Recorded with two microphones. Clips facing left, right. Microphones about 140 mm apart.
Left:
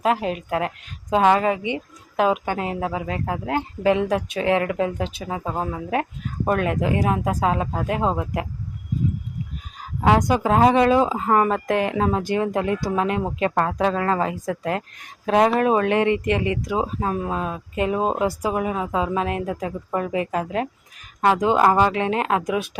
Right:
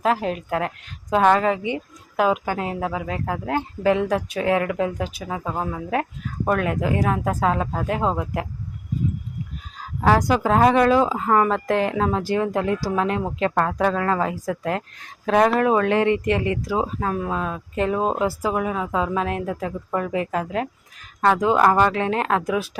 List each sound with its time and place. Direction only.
0.0 s a woman's voice: 15° left (ahead or behind)
10.0 s speech: 20° left (ahead or behind)
17.2 s speech: 5° left (ahead or behind)
18.2 s speech: 20° left (ahead or behind)